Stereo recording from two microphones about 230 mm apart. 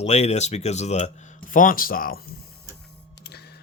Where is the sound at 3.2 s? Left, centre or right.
Left.